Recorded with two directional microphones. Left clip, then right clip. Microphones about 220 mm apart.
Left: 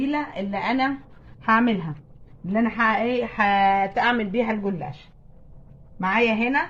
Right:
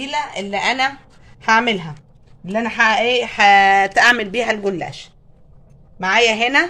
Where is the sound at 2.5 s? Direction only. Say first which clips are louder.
Right 6 dB; 45° right (ahead or behind).